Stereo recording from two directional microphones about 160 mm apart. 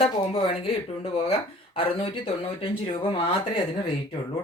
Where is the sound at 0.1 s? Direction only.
35° left (ahead or behind).